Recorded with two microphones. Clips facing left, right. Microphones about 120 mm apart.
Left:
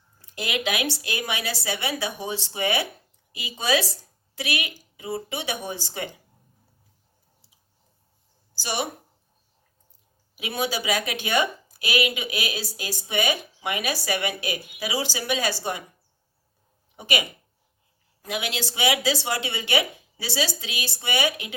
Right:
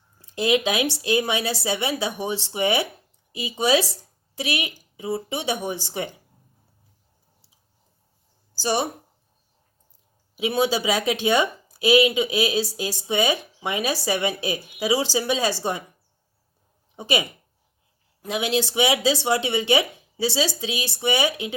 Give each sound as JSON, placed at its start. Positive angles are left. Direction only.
{"t": 0.3, "sound": "speech", "side_deg": -25}
{"t": 8.5, "sound": "speech", "side_deg": -35}
{"t": 10.3, "sound": "speech", "side_deg": -25}
{"t": 17.0, "sound": "speech", "side_deg": -30}
{"t": 18.3, "sound": "speech", "side_deg": -25}